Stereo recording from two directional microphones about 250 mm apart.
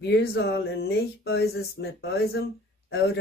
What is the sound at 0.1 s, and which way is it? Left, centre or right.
Speech, left.